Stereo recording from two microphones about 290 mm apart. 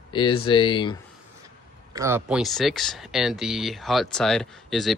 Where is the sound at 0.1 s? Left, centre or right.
Centre.